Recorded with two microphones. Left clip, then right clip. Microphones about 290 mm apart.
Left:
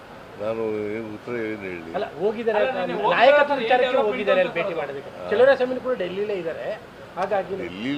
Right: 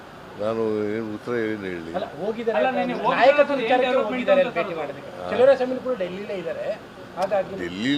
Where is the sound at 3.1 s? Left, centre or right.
Left.